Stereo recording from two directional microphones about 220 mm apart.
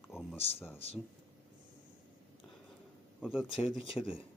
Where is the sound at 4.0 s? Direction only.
15° left (ahead or behind).